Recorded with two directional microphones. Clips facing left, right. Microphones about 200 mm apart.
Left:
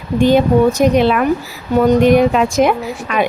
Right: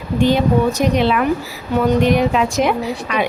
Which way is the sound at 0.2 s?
50° left (ahead or behind).